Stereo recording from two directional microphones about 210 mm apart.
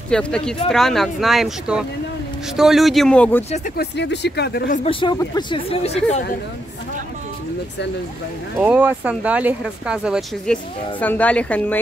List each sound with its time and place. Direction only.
0.1 s speech: 5° left (ahead or behind)
3.7 s speech: 55° left (ahead or behind)
4.8 s speech: 20° left (ahead or behind)
8.5 s speech: 5° right (ahead or behind)